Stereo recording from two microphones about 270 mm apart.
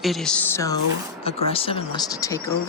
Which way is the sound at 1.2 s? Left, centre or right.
Left.